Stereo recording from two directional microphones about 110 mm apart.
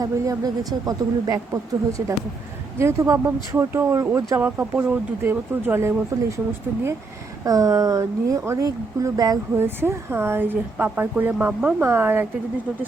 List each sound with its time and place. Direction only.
0.0 s speech: 35° right (ahead or behind)
2.7 s speech: 25° right (ahead or behind)
7.4 s speech: 35° right (ahead or behind)
9.6 s speech: 20° right (ahead or behind)